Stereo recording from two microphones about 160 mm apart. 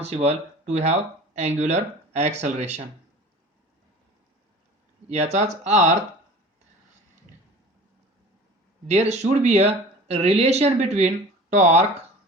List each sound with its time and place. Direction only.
0.0 s speech: 40° right (ahead or behind)
5.0 s speech: 45° right (ahead or behind)
8.9 s speech: 45° right (ahead or behind)